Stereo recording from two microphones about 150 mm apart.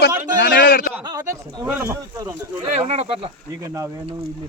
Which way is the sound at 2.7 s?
45° right (ahead or behind).